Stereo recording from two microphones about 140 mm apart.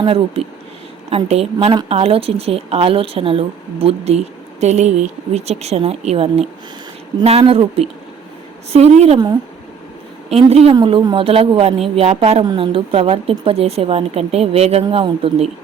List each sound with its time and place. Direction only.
0.0 s a woman's voice: 40° right (ahead or behind)
10.5 s a woman's voice: 45° right (ahead or behind)